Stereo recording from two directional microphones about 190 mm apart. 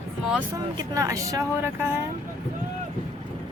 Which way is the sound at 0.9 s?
15° right (ahead or behind).